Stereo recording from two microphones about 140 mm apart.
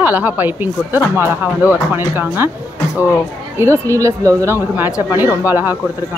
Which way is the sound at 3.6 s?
20° right (ahead or behind).